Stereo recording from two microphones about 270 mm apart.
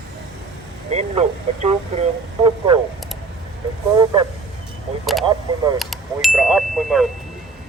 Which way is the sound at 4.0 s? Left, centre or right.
Centre.